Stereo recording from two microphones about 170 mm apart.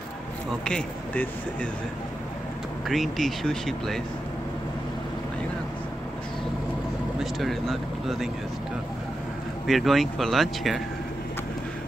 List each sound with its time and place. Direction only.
0.7 s speech: 5° left (ahead or behind)
2.9 s speech: centre (ahead or behind)
7.2 s speech: centre (ahead or behind)
9.7 s speech: centre (ahead or behind)